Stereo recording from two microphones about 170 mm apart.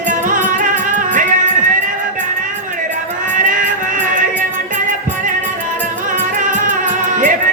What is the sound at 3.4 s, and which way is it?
Music, 50° right (ahead or behind).